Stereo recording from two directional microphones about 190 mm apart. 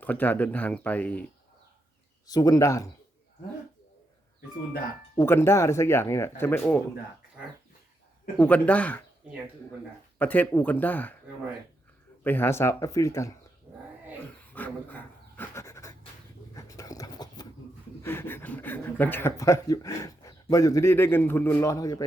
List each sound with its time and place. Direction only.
0.0 s speech: 10° left (ahead or behind)
2.2 s speech: 20° left (ahead or behind)
5.1 s speech: 15° left (ahead or behind)
8.4 s speech: 5° left (ahead or behind)
10.2 s speech: 10° left (ahead or behind)
12.2 s speech: 10° left (ahead or behind)
14.5 s pant: 10° left (ahead or behind)
16.6 s a sound: 20° left (ahead or behind)
18.0 s speech: 10° left (ahead or behind)